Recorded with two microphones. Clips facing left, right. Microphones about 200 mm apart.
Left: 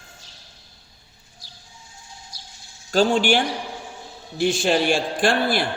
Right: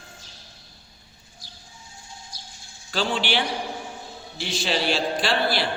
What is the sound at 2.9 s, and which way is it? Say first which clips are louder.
A man's voice: left 7 dB; 45° left (ahead or behind).